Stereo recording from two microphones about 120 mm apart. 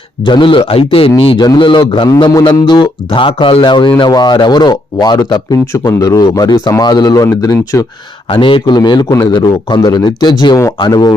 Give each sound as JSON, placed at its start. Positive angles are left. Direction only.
{"t": 0.3, "sound": "a man's voice", "side_deg": 45}
{"t": 8.3, "sound": "speech", "side_deg": 45}